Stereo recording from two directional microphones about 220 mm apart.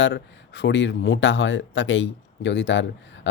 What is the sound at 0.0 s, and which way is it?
Speech, 55° left (ahead or behind).